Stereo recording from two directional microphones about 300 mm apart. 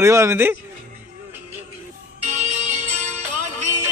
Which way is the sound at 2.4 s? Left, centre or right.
Right.